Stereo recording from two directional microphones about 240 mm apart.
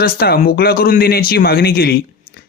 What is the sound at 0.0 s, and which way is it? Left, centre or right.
Speech, left.